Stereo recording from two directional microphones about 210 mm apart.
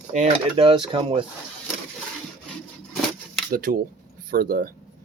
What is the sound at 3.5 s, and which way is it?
Speech, 45° right (ahead or behind).